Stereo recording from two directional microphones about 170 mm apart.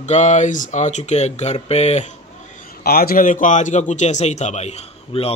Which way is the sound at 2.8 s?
60° left (ahead or behind).